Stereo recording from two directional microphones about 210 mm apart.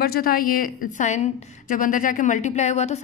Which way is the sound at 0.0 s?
45° left (ahead or behind).